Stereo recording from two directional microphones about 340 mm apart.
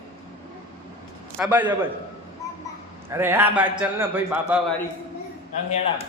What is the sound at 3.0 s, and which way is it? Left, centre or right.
A man's voice, centre.